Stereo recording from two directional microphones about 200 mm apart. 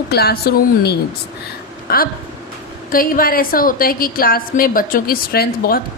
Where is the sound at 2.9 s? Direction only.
45° left (ahead or behind).